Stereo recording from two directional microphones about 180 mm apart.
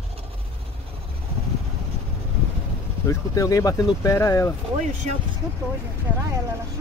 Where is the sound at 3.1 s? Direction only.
20° left (ahead or behind).